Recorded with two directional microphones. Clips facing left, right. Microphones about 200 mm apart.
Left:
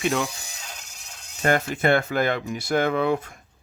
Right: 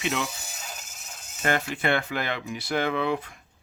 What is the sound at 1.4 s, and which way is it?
Speech, 40° left (ahead or behind).